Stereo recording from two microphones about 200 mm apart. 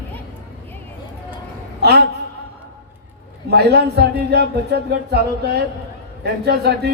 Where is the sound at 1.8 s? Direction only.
55° right (ahead or behind).